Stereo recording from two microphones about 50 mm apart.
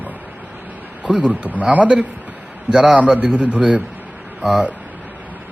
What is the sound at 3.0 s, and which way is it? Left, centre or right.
Speech, right.